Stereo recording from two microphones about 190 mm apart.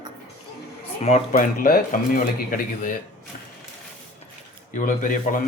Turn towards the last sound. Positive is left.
turn(degrees=45)  # may be behind; listen again after turning